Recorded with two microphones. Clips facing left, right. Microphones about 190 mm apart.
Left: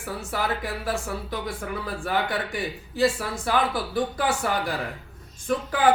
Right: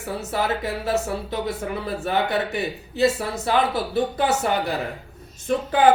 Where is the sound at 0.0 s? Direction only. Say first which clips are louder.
Right 4 dB; 25° right (ahead or behind).